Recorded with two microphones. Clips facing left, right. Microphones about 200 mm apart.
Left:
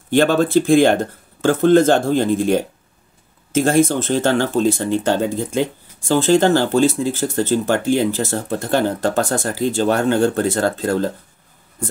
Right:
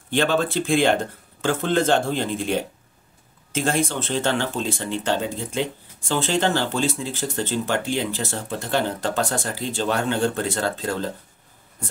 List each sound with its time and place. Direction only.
0.1 s speech: 45° left (ahead or behind)